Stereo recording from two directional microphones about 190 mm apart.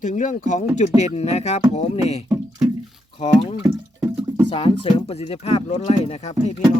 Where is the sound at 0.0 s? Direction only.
40° left (ahead or behind).